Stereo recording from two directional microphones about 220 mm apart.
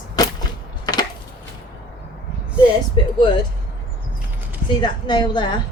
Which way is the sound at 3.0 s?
20° left (ahead or behind).